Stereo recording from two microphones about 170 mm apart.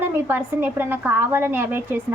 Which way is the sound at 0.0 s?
15° right (ahead or behind).